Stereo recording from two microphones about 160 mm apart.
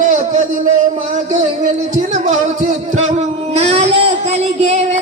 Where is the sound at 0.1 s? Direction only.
50° right (ahead or behind).